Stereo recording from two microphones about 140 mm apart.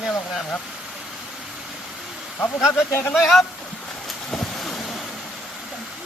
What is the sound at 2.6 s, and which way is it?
Speech, 5° right (ahead or behind).